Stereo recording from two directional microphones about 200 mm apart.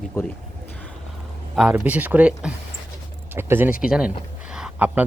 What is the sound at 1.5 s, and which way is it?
Speech, 5° right (ahead or behind).